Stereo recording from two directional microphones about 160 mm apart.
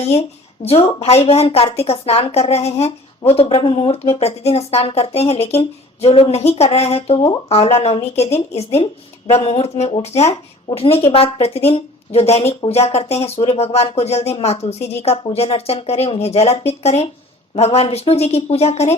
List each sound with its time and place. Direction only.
0.1 s speech: 40° left (ahead or behind)